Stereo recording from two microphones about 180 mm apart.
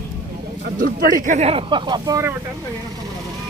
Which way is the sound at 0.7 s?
50° right (ahead or behind).